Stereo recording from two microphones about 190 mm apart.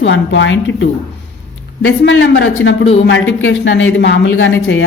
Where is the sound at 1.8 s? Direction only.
90° left.